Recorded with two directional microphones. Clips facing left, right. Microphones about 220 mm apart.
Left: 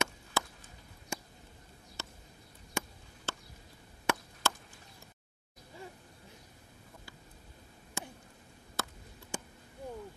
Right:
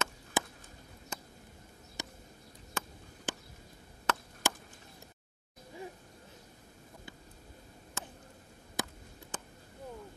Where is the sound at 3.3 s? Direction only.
15° right (ahead or behind).